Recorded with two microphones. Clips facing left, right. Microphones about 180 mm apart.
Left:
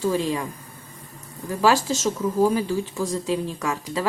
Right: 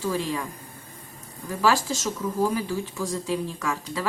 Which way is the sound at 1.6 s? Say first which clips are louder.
Left 3 dB; 20° left (ahead or behind).